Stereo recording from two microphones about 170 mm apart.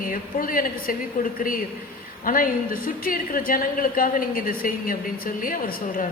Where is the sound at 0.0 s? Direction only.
55° left (ahead or behind).